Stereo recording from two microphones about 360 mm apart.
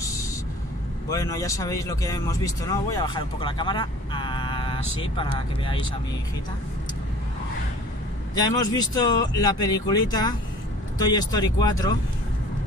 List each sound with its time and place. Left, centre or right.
0.0 s vehicle: centre
1.1 s speech: centre
8.4 s speech: centre